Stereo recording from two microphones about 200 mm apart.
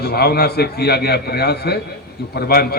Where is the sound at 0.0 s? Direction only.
50° left (ahead or behind).